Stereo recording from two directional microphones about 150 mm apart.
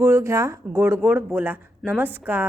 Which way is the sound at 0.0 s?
20° right (ahead or behind).